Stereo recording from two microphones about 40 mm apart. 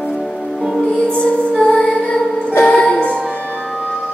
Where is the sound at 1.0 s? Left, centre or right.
Left.